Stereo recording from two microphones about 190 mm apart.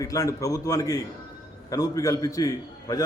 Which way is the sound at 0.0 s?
15° left (ahead or behind).